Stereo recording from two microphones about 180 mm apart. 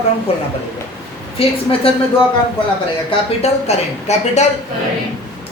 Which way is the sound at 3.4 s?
40° left (ahead or behind).